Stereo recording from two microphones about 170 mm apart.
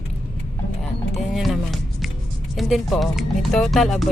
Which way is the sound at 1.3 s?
Centre (ahead or behind).